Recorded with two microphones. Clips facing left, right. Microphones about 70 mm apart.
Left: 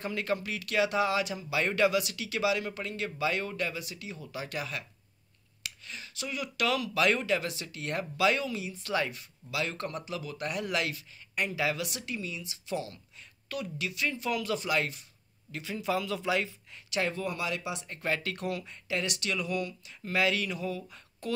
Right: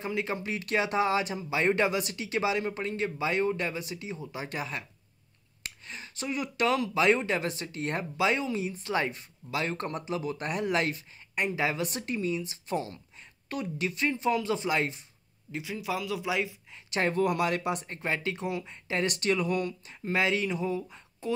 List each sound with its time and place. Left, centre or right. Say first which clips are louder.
0.0 s speech: even; centre
15.6 s speech: left 2 dB; centre
16.9 s speech: right 3 dB; right
17.2 s speech: right 7 dB; right
17.8 s speech: right 1 dB; right
20.1 s speech: right 2 dB; right